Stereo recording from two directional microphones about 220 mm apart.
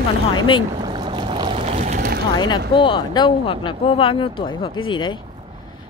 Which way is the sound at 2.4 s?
20° left (ahead or behind).